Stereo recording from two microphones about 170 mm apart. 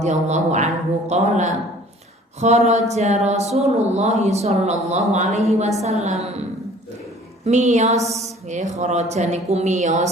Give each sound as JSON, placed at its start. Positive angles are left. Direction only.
{"t": 0.0, "sound": "a woman's voice", "side_deg": -40}
{"t": 7.4, "sound": "speech", "side_deg": -40}